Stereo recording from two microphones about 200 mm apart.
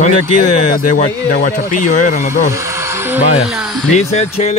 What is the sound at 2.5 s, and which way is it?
Music, 15° right (ahead or behind).